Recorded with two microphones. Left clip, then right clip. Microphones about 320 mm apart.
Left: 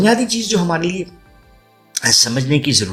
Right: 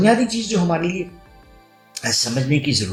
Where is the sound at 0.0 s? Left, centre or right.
Left.